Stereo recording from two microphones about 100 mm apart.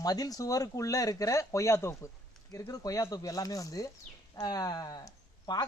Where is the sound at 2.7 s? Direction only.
35° left (ahead or behind).